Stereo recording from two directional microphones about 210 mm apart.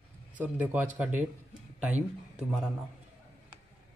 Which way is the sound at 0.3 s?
5° right (ahead or behind).